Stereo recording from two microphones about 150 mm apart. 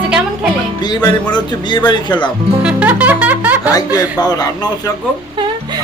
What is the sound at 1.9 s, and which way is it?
Speech, 30° left (ahead or behind).